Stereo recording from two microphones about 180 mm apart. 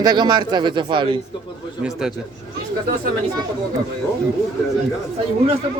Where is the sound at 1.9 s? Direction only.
5° right (ahead or behind).